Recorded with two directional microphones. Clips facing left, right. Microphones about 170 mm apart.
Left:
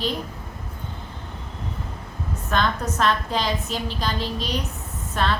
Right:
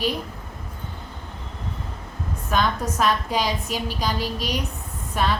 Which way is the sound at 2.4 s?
10° right (ahead or behind).